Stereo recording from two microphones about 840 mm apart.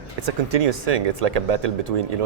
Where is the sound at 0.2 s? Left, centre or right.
Right.